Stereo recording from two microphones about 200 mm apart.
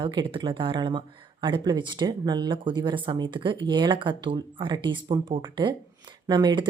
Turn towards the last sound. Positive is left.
turn(degrees=-25)  # may be behind; listen again after turning